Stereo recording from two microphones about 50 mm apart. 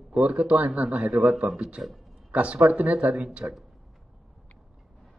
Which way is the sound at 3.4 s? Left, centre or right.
Right.